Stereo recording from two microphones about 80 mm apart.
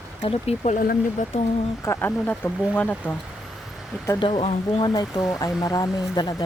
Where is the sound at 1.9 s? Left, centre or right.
Left.